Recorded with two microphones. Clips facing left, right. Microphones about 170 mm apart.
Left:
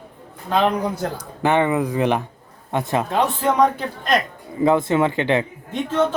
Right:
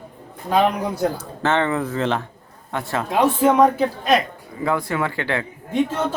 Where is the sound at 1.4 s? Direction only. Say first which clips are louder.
Left 2 dB; 15° left (ahead or behind).